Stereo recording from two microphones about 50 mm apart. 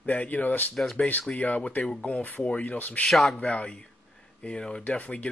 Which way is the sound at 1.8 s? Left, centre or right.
Centre.